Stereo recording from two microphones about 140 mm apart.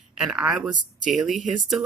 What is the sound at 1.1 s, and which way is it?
Speech, centre (ahead or behind).